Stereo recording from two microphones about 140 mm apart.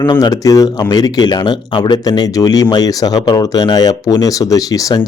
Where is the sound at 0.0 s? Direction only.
30° left (ahead or behind).